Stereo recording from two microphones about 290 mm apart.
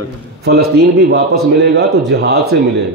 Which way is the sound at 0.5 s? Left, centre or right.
Right.